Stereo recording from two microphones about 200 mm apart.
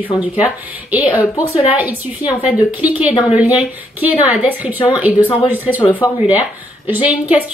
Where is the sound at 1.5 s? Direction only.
25° left (ahead or behind).